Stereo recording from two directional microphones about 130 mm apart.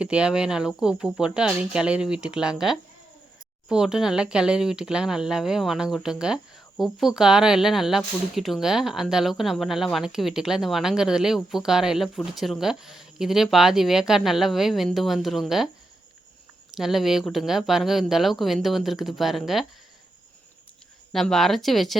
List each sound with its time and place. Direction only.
0.0 s speech: 10° right (ahead or behind)
16.7 s speech: centre (ahead or behind)
21.1 s speech: centre (ahead or behind)